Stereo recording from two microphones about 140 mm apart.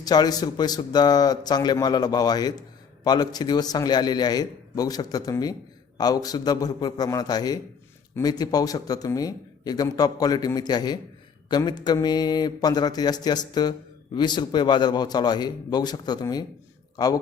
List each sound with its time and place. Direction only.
0.0 s a man's voice: 30° left (ahead or behind)